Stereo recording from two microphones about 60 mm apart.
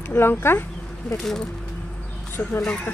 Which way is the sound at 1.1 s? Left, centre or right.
Centre.